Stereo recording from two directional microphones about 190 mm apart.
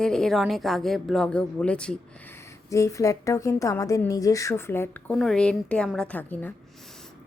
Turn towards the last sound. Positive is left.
turn(degrees=10)  # may be behind; listen again after turning